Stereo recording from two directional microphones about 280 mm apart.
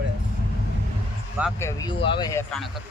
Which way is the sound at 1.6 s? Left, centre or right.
Centre.